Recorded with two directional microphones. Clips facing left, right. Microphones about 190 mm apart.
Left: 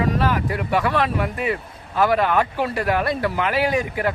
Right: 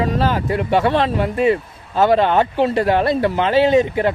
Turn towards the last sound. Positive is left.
turn(degrees=-25)  # may be behind; listen again after turning